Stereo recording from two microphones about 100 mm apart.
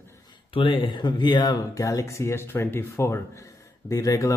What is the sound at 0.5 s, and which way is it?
Speech, 60° left (ahead or behind).